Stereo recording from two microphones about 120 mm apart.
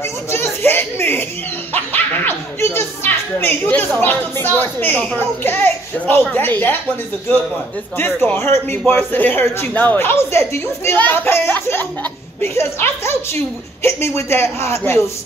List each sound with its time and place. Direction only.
0.3 s speech: 20° left (ahead or behind)
8.0 s a man's voice: 20° left (ahead or behind)